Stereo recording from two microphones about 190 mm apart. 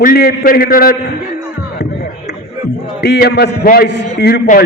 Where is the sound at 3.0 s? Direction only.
60° left (ahead or behind).